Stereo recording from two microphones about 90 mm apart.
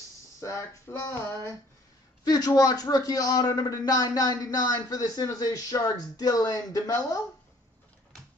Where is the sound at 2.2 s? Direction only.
45° left (ahead or behind).